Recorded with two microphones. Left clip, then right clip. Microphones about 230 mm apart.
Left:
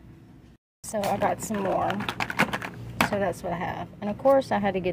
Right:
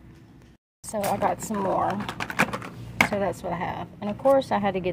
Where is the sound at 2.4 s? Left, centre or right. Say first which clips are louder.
Left 2 dB; centre.